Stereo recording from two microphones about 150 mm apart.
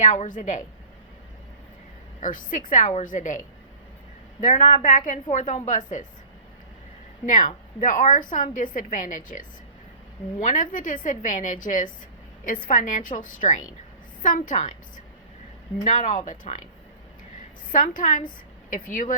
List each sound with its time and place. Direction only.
0.0 s a woman's voice: 55° left (ahead or behind)
2.2 s a woman's voice: 60° left (ahead or behind)
7.3 s a woman's voice: 60° left (ahead or behind)
17.7 s a woman's voice: 60° left (ahead or behind)